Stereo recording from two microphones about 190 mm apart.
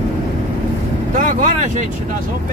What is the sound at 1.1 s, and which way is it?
Vehicle, 40° right (ahead or behind).